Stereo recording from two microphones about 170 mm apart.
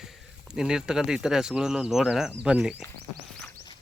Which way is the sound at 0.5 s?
5° right (ahead or behind).